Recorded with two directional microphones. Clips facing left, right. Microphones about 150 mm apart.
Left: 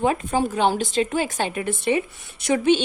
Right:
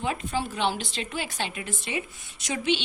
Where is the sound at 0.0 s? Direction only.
45° left (ahead or behind).